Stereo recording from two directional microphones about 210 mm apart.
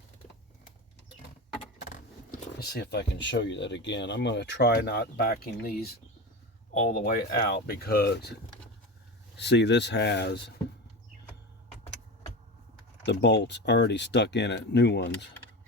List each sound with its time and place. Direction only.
1.8 s speech: 40° left (ahead or behind)
9.4 s speech: 55° left (ahead or behind)
13.1 s speech: 55° left (ahead or behind)